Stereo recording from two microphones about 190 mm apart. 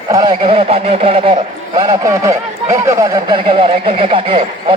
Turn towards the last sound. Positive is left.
turn(degrees=-25)  # may be behind; listen again after turning